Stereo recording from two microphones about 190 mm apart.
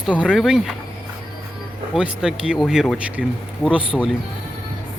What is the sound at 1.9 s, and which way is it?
Speech, 5° right (ahead or behind).